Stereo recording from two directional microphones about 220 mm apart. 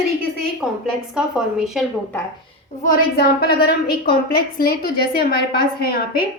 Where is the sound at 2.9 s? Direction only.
45° left (ahead or behind).